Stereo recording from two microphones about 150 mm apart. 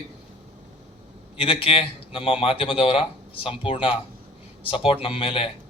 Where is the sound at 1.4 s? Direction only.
40° left (ahead or behind).